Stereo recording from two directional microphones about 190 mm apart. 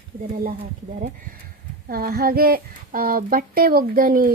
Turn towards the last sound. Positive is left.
turn(degrees=-50)  # may be behind; listen again after turning